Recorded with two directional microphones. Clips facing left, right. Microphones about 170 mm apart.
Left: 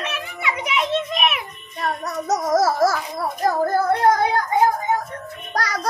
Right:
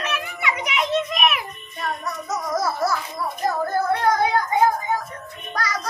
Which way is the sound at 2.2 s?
40° left (ahead or behind).